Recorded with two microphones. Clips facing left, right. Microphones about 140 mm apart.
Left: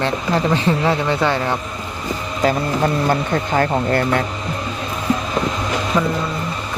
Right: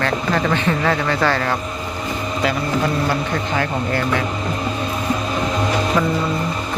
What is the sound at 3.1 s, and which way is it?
Speech, 40° left (ahead or behind).